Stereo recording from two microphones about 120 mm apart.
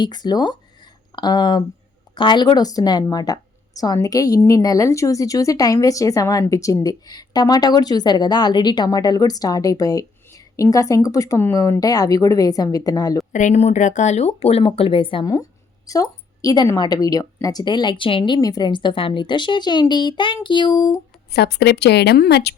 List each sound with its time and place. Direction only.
0.0 s speech: 35° left (ahead or behind)
13.3 s speech: 80° left
14.3 s speech: 55° left (ahead or behind)
15.2 s speech: 30° left (ahead or behind)
18.3 s speech: 30° left (ahead or behind)